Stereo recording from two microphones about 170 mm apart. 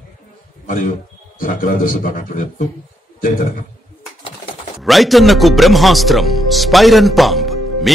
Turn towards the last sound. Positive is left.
turn(degrees=0)  # may be behind; listen again after turning